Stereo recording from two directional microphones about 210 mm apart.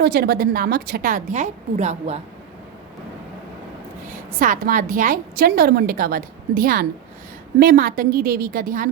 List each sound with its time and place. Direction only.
0.0 s a woman's voice: 50° right (ahead or behind); by 2.1 s 35° right (ahead or behind)
4.4 s a woman's voice: 40° right (ahead or behind)